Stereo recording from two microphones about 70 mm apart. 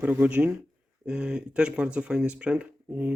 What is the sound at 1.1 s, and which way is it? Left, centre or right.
Speech, centre.